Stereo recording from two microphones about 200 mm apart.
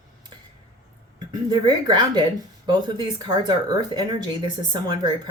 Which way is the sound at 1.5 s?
20° right (ahead or behind).